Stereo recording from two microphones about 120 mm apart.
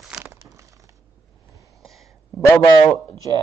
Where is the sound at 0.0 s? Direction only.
5° right (ahead or behind).